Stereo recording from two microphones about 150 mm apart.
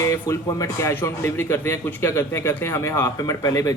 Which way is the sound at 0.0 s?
20° left (ahead or behind).